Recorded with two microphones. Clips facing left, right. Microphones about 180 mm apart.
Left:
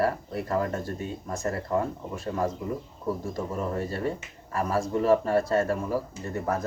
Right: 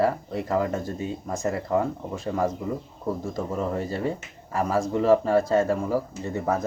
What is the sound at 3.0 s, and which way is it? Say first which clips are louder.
Speech: right 2 dB; 20° right (ahead or behind).